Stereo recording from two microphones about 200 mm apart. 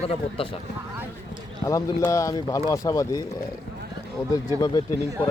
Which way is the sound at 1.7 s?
15° left (ahead or behind).